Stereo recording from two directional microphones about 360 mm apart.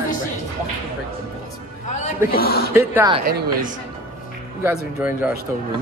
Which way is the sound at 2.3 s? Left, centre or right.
Left.